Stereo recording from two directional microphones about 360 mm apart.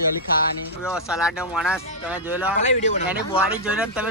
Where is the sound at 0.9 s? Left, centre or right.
Centre.